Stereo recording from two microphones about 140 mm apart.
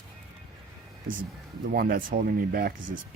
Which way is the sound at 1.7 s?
90° right.